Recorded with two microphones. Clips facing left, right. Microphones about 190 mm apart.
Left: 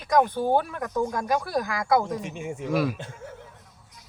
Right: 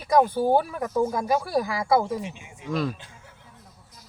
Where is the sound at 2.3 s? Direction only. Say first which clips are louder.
Left 14 dB; 50° left (ahead or behind).